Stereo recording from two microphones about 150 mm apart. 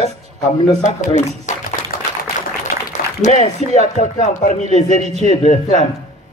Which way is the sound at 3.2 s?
50° left (ahead or behind).